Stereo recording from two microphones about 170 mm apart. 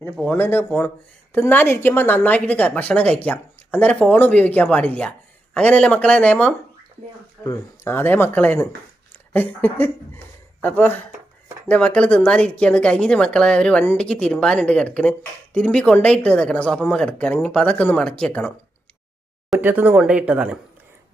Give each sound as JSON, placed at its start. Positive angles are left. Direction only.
{"t": 0.0, "sound": "a woman's voice", "side_deg": 10}
{"t": 7.4, "sound": "a woman's voice", "side_deg": 15}
{"t": 19.5, "sound": "speech", "side_deg": -10}